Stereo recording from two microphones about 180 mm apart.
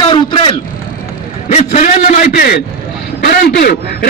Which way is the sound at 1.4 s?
40° left (ahead or behind).